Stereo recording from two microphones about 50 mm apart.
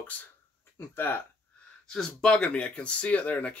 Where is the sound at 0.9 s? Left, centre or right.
Left.